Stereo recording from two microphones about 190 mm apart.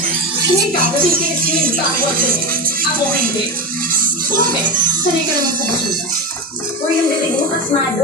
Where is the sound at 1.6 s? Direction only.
50° right (ahead or behind).